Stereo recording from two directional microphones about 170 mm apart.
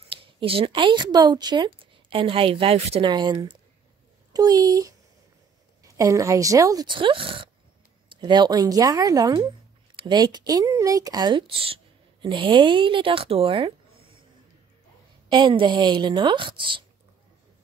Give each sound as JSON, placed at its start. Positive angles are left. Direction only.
{"t": 0.1, "sound": "a woman's voice", "side_deg": -30}
{"t": 5.9, "sound": "speech", "side_deg": -20}
{"t": 15.2, "sound": "speech", "side_deg": -25}